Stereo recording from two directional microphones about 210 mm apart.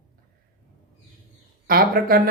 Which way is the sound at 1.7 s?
45° right (ahead or behind).